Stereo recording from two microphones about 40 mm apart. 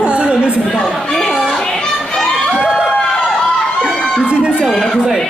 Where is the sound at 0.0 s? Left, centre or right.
Right.